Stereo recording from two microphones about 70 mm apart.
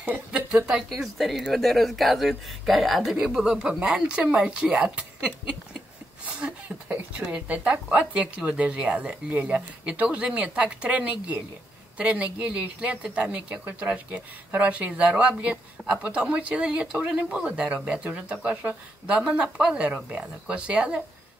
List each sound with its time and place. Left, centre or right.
0.3 s speech: centre
0.8 s speech: centre